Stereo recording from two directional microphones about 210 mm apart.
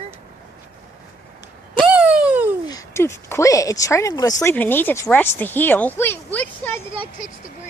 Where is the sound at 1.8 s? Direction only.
5° right (ahead or behind).